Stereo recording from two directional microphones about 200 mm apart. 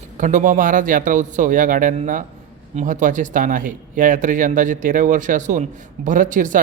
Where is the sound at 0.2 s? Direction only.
40° right (ahead or behind).